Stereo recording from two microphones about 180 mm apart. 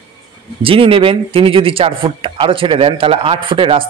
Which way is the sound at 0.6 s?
30° right (ahead or behind).